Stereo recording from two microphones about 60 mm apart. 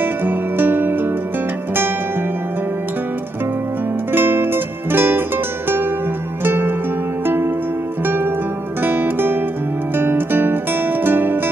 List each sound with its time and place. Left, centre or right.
0.0 s music: right
4.1 s music: right
6.4 s music: right